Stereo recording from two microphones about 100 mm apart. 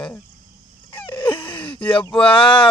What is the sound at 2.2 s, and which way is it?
Speech, 60° left (ahead or behind).